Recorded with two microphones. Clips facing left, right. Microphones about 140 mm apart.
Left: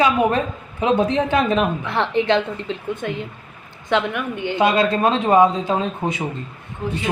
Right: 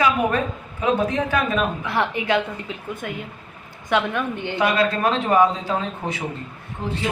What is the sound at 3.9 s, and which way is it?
Speech, 20° left (ahead or behind).